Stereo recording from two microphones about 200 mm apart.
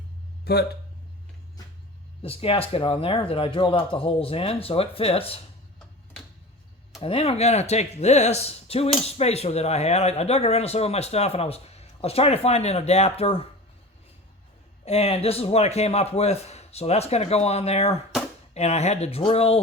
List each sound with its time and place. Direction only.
0.5 s speech: 55° left (ahead or behind)
2.2 s speech: 30° left (ahead or behind)
7.0 s speech: 30° left (ahead or behind)
14.8 s speech: 30° left (ahead or behind)